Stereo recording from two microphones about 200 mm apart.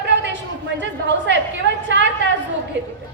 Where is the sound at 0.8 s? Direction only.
60° right (ahead or behind).